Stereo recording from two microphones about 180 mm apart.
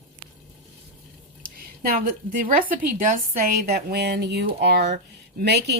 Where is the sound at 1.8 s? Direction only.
50° right (ahead or behind).